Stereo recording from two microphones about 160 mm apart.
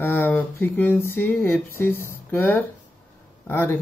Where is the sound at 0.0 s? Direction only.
15° left (ahead or behind).